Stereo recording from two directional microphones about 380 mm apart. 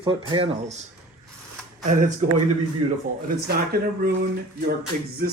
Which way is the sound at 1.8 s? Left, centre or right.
Centre.